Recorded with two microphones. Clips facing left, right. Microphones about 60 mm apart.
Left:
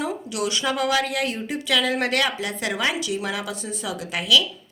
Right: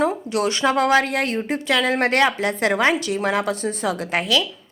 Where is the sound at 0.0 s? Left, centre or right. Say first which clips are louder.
Right 6 dB; right.